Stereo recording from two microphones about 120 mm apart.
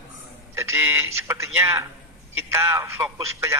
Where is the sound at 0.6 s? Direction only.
20° right (ahead or behind).